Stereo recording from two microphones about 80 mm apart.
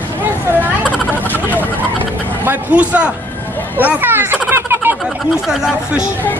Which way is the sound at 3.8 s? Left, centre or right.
Right.